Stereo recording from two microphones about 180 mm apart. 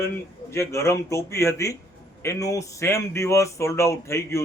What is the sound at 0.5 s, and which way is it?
Speech, 15° left (ahead or behind).